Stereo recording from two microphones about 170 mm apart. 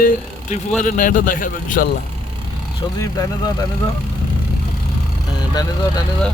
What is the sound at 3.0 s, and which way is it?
Speech, 20° left (ahead or behind).